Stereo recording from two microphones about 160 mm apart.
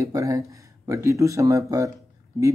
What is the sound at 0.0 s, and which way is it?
Speech, 20° right (ahead or behind).